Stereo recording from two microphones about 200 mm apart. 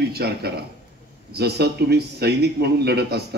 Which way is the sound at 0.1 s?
55° right (ahead or behind).